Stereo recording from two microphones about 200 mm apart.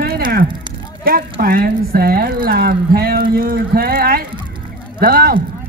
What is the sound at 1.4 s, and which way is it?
A woman's voice, 50° right (ahead or behind).